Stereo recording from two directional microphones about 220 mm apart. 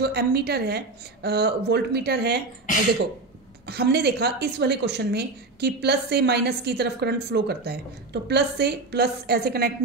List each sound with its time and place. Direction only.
0.0 s a woman's voice: 50° right (ahead or behind)
3.6 s a woman's voice: 45° right (ahead or behind)